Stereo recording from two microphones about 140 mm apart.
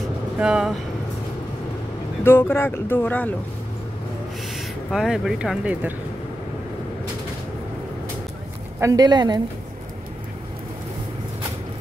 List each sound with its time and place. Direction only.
0.4 s speech: 5° right (ahead or behind)
2.2 s speech: 15° left (ahead or behind)
4.6 s speech: 5° right (ahead or behind)
8.7 s speech: 25° right (ahead or behind)